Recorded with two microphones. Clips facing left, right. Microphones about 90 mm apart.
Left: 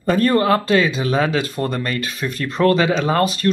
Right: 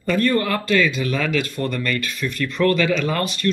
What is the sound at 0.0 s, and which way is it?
Speech, 40° left (ahead or behind).